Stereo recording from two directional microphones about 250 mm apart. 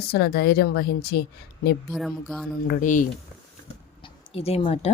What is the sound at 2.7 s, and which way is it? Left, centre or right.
Speech, left.